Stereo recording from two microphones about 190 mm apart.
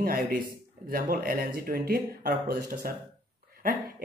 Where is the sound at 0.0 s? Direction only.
50° right (ahead or behind).